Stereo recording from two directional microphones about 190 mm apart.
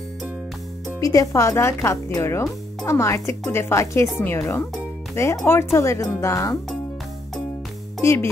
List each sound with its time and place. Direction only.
1.0 s speech: 15° left (ahead or behind)
8.0 s speech: 15° left (ahead or behind)